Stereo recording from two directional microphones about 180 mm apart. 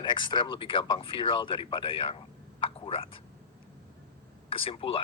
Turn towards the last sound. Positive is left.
turn(degrees=30)  # may be behind; listen again after turning